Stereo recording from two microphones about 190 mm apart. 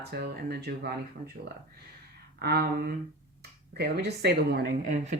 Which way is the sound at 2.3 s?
55° right (ahead or behind).